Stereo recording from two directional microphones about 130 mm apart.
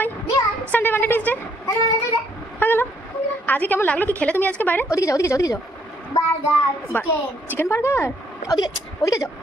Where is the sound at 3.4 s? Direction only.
15° left (ahead or behind).